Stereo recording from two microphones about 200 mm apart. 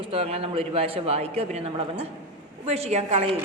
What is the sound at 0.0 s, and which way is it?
A man's voice, 30° right (ahead or behind).